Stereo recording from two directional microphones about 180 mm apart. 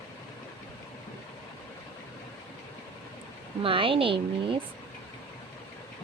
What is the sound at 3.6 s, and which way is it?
Speech, 30° right (ahead or behind).